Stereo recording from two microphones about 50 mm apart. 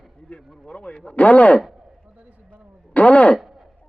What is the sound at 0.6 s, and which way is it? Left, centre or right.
Speech, centre.